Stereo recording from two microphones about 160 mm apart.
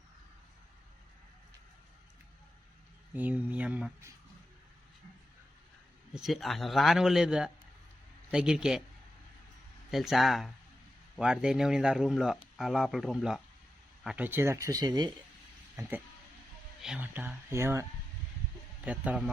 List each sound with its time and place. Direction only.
3.2 s speech: 10° right (ahead or behind)
6.1 s speech: centre (ahead or behind)
9.9 s speech: centre (ahead or behind)
14.3 s speech: 15° right (ahead or behind)
15.7 s speech: 10° right (ahead or behind)
18.9 s speech: 5° right (ahead or behind)